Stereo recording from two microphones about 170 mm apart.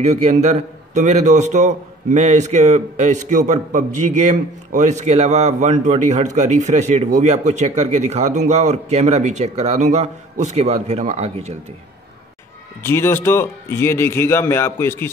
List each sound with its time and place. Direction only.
0.0 s a man's voice: 40° right (ahead or behind)
12.8 s a man's voice: 15° left (ahead or behind)